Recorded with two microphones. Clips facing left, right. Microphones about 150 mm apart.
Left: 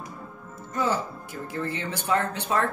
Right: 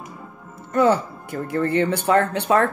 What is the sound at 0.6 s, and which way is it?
Speech, 65° right (ahead or behind).